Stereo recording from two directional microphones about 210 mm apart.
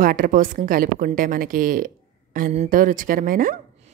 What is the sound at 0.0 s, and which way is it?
A woman's voice, 40° right (ahead or behind).